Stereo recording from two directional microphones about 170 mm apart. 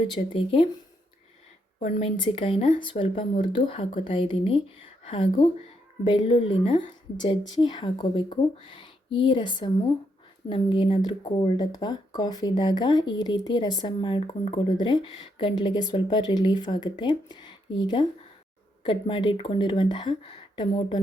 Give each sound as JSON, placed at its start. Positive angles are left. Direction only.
{"t": 0.1, "sound": "speech", "side_deg": 30}
{"t": 1.8, "sound": "speech", "side_deg": 35}